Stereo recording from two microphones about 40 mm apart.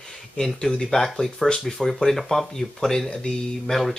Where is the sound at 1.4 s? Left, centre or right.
Centre.